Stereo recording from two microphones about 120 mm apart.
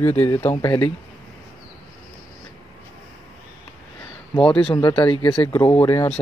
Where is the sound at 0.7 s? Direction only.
45° left (ahead or behind).